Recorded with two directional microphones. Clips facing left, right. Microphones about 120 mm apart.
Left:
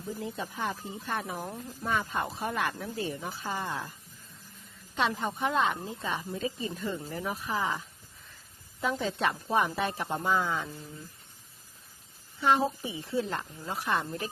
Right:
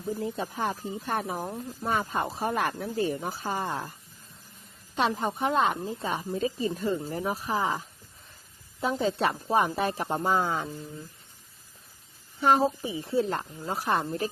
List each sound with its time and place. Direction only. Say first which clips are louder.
0.2 s a woman's voice: right 4 dB; 35° right (ahead or behind)
4.9 s a woman's voice: right 3 dB; 35° right (ahead or behind)
12.4 s a woman's voice: right 3 dB; 40° right (ahead or behind)